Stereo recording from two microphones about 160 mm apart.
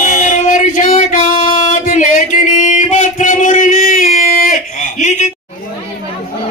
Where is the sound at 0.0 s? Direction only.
50° left (ahead or behind).